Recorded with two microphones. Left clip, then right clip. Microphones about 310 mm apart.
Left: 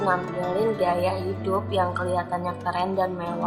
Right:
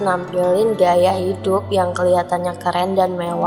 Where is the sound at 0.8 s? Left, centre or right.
Right.